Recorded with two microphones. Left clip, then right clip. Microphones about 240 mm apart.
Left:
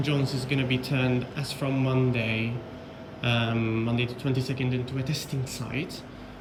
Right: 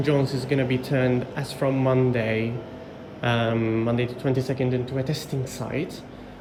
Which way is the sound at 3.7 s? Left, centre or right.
Centre.